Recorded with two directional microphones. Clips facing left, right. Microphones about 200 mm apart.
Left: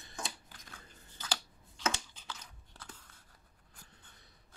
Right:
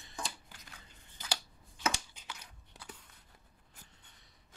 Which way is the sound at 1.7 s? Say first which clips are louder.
Even; 15° right (ahead or behind).